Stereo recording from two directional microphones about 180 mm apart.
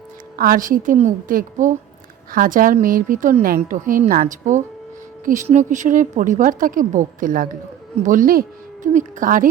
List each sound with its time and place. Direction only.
0.3 s a woman's voice: 50° right (ahead or behind)